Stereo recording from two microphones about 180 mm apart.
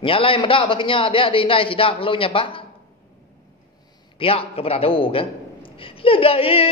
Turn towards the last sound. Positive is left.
turn(degrees=30)  # may be behind; listen again after turning